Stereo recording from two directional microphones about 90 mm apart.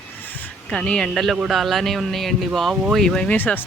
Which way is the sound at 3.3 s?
20° left (ahead or behind).